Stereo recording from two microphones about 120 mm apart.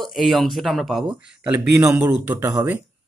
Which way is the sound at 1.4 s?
20° right (ahead or behind).